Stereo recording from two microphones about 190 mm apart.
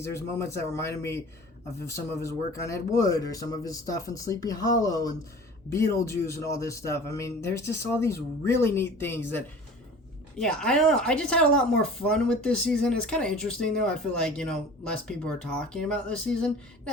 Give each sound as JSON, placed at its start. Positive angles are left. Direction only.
{"t": 0.0, "sound": "a man's voice", "side_deg": 15}